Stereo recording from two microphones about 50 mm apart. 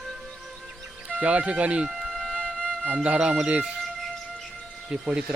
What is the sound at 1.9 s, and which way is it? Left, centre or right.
Wind instrument, centre.